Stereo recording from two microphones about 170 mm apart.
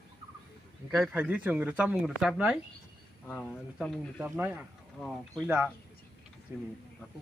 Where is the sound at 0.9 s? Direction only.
5° right (ahead or behind).